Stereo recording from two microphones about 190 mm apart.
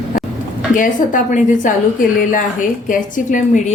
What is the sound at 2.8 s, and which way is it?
Speech, 45° left (ahead or behind).